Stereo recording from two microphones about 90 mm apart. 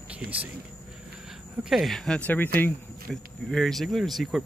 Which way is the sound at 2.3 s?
20° left (ahead or behind).